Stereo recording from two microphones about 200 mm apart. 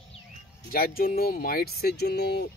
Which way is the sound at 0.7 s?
45° left (ahead or behind).